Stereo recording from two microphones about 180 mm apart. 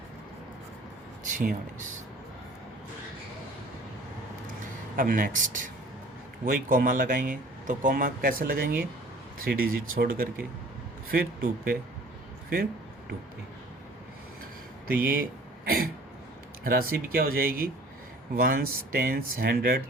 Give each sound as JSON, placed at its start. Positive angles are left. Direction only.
{"t": 1.2, "sound": "speech", "side_deg": -45}
{"t": 4.9, "sound": "speech", "side_deg": -50}
{"t": 14.8, "sound": "speech", "side_deg": -55}
{"t": 16.6, "sound": "speech", "side_deg": -55}